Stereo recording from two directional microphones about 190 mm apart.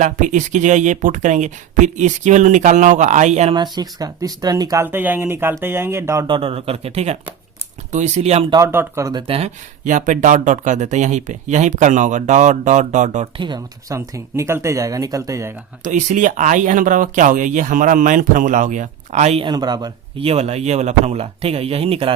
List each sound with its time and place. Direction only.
0.0 s speech: 40° right (ahead or behind)
3.5 s speech: 20° right (ahead or behind)
6.2 s speech: 25° right (ahead or behind)
8.5 s speech: 15° right (ahead or behind)
9.2 s speech: 30° right (ahead or behind)
13.4 s speech: 20° right (ahead or behind)
15.8 s speech: 40° right (ahead or behind)